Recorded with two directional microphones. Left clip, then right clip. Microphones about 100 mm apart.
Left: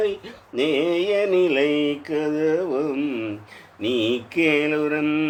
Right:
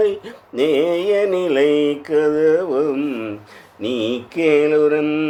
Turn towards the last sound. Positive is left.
turn(degrees=-35)  # may be behind; listen again after turning